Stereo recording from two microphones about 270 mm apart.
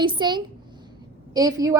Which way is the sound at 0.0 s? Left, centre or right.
Centre.